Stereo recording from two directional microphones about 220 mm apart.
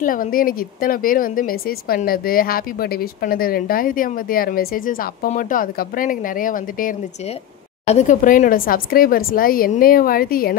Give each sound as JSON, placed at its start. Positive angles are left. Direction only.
{"t": 0.0, "sound": "speech", "side_deg": 40}